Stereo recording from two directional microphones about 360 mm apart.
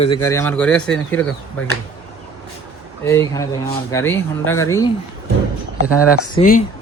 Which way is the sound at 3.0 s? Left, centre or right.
Centre.